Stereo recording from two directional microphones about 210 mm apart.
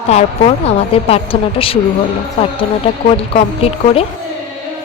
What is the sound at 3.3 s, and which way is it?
Speech, 30° left (ahead or behind).